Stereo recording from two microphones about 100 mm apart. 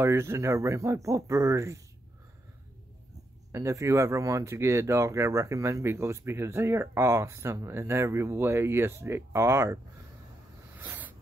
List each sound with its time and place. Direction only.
0.0 s speech: 25° right (ahead or behind)
3.5 s speech: 30° right (ahead or behind)
10.8 s a sound: 20° right (ahead or behind)